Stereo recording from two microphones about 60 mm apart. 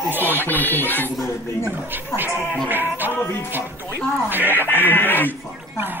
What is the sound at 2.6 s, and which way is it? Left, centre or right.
Music, right.